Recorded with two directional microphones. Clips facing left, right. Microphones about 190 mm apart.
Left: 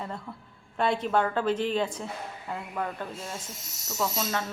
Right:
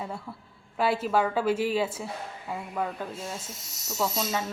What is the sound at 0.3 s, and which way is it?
A woman's voice, 10° right (ahead or behind).